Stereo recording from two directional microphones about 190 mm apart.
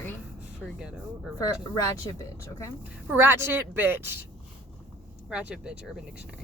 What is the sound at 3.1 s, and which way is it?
A woman's voice, 10° right (ahead or behind).